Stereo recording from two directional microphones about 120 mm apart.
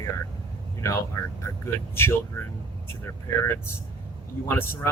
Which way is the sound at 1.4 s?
20° left (ahead or behind).